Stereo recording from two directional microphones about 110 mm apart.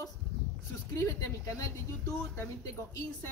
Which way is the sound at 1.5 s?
30° left (ahead or behind).